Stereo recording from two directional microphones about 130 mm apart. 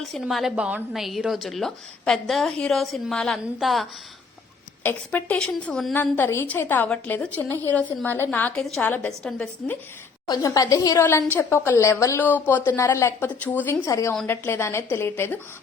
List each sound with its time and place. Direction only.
0.0 s a woman's voice: centre (ahead or behind)
4.8 s a woman's voice: 15° left (ahead or behind)
5.9 s a woman's voice: 15° left (ahead or behind)
10.2 s a woman's voice: 30° left (ahead or behind); by 13.7 s 15° left (ahead or behind)
13.8 s a woman's voice: 25° left (ahead or behind)